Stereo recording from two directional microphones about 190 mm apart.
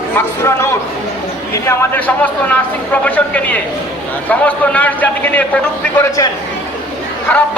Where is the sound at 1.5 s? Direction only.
10° left (ahead or behind).